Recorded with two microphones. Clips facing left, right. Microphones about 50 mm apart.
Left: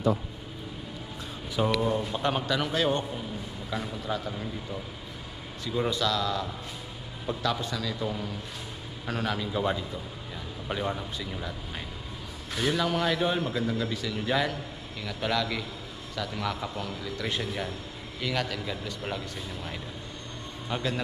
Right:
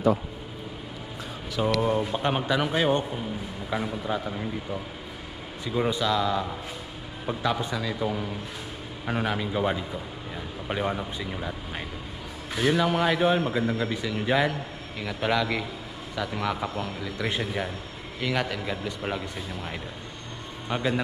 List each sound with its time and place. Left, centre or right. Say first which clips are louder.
1.8 s a man's voice: right 3 dB; right
5.7 s a man's voice: right 2 dB; centre